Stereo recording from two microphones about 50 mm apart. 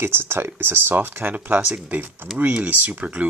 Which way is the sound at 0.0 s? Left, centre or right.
Right.